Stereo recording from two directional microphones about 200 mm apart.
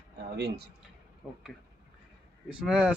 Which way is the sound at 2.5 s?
5° right (ahead or behind).